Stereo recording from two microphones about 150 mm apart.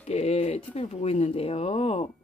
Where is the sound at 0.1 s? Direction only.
45° left (ahead or behind).